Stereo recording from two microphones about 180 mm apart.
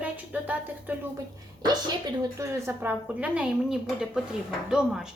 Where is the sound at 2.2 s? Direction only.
15° right (ahead or behind).